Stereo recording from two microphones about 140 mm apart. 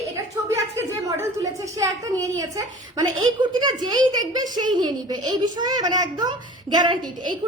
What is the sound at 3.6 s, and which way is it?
A woman's voice, 30° right (ahead or behind).